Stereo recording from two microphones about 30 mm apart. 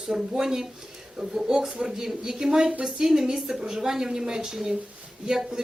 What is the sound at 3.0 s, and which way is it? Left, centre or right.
Speech, centre.